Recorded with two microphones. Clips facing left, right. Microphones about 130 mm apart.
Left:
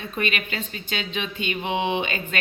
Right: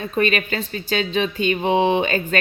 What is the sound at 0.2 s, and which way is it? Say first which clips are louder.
A woman's voice: right 7 dB; 40° right (ahead or behind).